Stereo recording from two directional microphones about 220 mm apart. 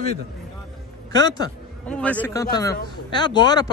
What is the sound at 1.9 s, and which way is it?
Speech, 5° left (ahead or behind).